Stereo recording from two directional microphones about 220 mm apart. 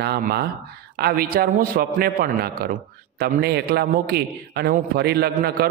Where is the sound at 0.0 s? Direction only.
45° right (ahead or behind).